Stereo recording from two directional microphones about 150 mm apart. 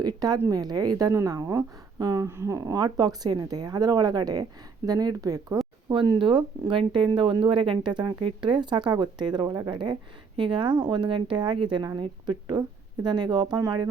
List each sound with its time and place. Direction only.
0.0 s a woman's voice: 25° right (ahead or behind)
5.9 s a woman's voice: 35° right (ahead or behind)